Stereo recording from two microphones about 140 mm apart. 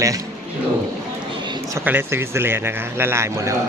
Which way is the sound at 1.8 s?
15° right (ahead or behind).